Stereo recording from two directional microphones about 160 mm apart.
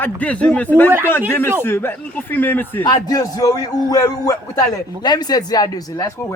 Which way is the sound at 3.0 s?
25° left (ahead or behind).